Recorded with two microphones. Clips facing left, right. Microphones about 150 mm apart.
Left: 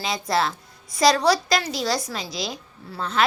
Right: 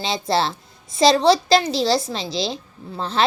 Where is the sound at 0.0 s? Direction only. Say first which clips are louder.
Right 2 dB; 30° right (ahead or behind).